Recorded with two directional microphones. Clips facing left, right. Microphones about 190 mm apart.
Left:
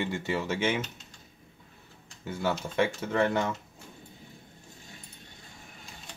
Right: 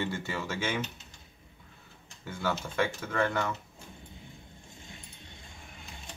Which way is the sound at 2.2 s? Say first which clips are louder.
Left 3 dB; 20° left (ahead or behind).